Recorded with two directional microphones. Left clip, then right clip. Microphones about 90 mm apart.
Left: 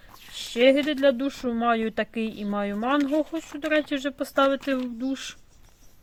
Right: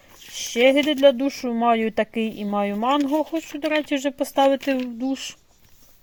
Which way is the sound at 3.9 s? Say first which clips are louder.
Right 4 dB; 35° right (ahead or behind).